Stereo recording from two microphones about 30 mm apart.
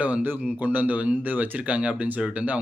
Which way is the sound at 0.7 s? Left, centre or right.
Right.